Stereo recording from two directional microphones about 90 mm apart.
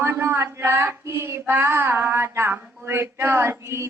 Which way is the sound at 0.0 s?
25° right (ahead or behind).